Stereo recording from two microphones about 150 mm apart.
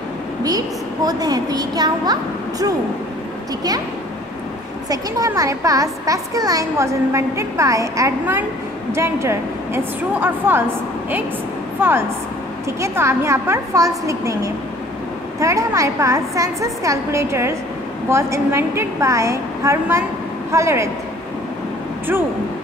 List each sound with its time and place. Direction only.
0.4 s a child's voice: 25° right (ahead or behind)
4.8 s a child's voice: 20° right (ahead or behind)
12.8 s a child's voice: 20° right (ahead or behind)